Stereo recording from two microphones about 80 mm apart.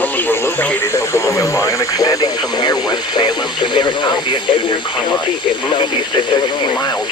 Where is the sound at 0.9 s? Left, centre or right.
Left.